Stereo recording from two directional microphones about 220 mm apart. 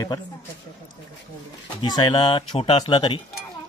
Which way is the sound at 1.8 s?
20° left (ahead or behind).